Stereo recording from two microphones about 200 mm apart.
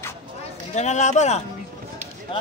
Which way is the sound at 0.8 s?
35° left (ahead or behind).